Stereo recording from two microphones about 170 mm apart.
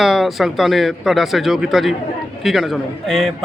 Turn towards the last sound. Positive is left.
turn(degrees=0)  # may be behind; listen again after turning